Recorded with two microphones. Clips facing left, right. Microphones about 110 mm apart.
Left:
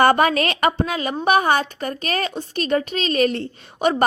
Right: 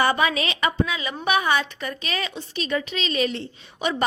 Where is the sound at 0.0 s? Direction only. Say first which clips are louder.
Left 6 dB; 50° left (ahead or behind).